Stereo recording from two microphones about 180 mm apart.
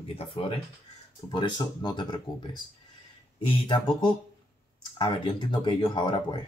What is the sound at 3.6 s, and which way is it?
A man's voice, 25° left (ahead or behind).